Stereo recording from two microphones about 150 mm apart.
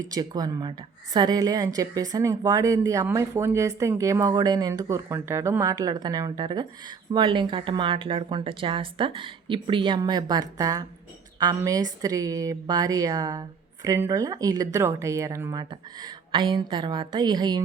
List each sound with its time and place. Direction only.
0.0 s a woman's voice: 25° right (ahead or behind)